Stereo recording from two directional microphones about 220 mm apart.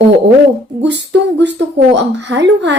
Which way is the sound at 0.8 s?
55° right (ahead or behind).